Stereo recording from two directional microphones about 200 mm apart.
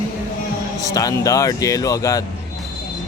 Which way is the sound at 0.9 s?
15° left (ahead or behind).